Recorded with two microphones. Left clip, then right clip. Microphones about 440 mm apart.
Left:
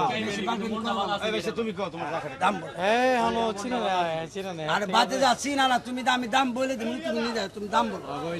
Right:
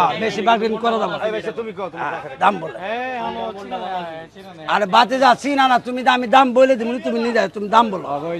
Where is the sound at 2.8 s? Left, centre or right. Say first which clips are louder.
Left 5 dB; left.